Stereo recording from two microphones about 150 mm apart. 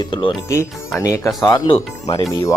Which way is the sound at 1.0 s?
20° left (ahead or behind).